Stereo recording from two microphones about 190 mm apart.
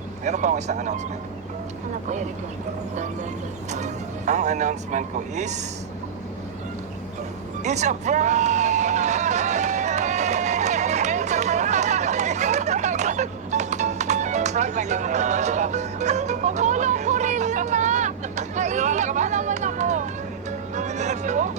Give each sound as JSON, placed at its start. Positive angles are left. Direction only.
{"t": 0.3, "sound": "speech", "side_deg": -40}
{"t": 3.7, "sound": "speech", "side_deg": -40}
{"t": 7.6, "sound": "hubbub", "side_deg": -35}
{"t": 20.7, "sound": "music", "side_deg": -40}